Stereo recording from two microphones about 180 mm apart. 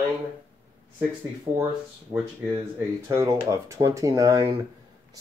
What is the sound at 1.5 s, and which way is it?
Speech, 25° right (ahead or behind).